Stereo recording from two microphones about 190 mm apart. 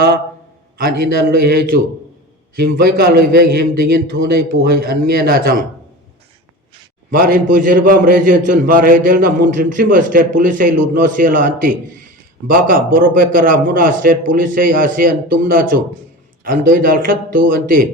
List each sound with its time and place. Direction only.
0.8 s a man's voice: 55° right (ahead or behind)
7.1 s a man's voice: 45° right (ahead or behind)